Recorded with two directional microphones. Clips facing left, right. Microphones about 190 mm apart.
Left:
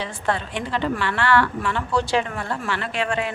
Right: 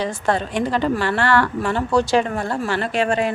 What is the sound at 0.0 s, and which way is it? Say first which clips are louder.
Speech: right 4 dB; 40° right (ahead or behind).